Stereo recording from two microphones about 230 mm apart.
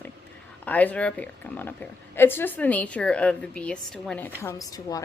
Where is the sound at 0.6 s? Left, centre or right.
Centre.